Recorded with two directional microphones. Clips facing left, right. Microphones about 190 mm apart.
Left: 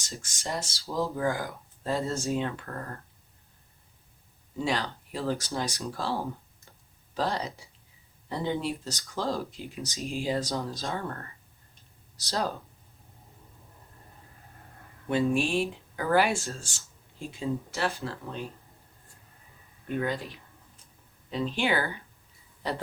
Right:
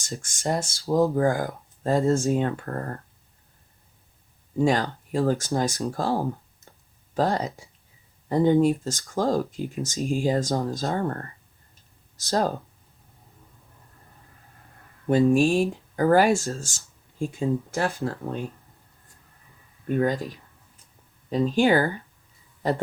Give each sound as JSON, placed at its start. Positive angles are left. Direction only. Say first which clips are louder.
{"t": 0.0, "sound": "speech", "louder": "right 8 dB", "side_deg": -50}
{"t": 4.5, "sound": "speech", "louder": "right 8 dB", "side_deg": -50}
{"t": 15.1, "sound": "speech", "louder": "right 7 dB", "side_deg": -40}
{"t": 19.9, "sound": "speech", "louder": "right 7 dB", "side_deg": -40}